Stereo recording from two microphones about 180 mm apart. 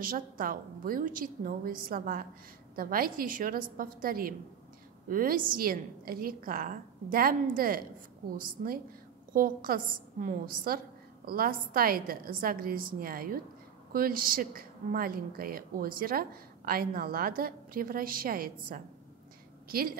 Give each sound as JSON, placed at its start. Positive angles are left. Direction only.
{"t": 0.0, "sound": "a woman's voice", "side_deg": -50}
{"t": 9.3, "sound": "a woman's voice", "side_deg": -50}